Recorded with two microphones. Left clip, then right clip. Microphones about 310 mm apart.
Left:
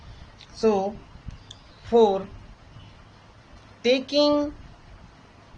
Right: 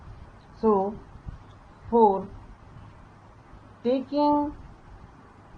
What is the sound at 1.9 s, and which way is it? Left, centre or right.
Speech, left.